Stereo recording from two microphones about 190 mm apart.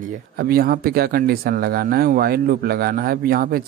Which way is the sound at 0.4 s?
50° right (ahead or behind).